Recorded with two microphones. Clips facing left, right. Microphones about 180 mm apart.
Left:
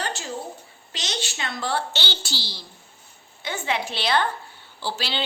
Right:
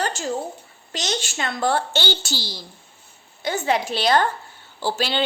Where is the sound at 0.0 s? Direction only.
45° right (ahead or behind).